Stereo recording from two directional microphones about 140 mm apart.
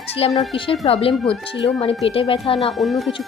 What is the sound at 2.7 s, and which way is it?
Speech, centre (ahead or behind).